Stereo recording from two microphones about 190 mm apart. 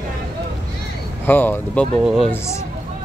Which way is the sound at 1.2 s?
10° left (ahead or behind).